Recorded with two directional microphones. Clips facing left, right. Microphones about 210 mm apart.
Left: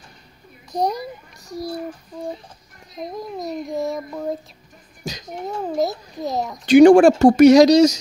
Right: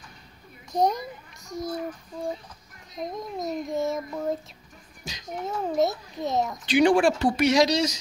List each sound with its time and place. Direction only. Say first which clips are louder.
0.7 s a child's voice: left 1 dB; centre (ahead or behind)
2.9 s a child's voice: left 3 dB; centre (ahead or behind)
5.1 s a child's voice: left 10 dB; 40° left (ahead or behind)
5.7 s a child's voice: left 1 dB; centre (ahead or behind)
6.6 s speech: left 11 dB; 45° left (ahead or behind)